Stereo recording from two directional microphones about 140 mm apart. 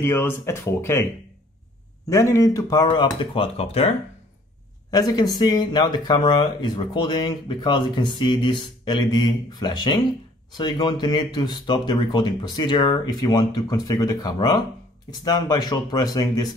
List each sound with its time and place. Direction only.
0.0 s speech: 15° left (ahead or behind)
2.0 s speech: 20° left (ahead or behind)
3.2 s speech: 40° left (ahead or behind)
4.9 s speech: 30° left (ahead or behind)